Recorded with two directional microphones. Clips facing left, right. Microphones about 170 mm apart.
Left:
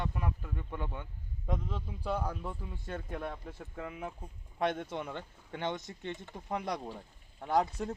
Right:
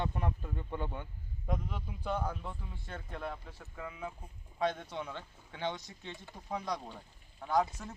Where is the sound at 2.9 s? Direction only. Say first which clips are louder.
Left 2 dB; 20° left (ahead or behind).